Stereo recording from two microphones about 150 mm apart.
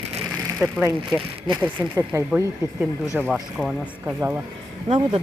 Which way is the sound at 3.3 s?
Centre (ahead or behind).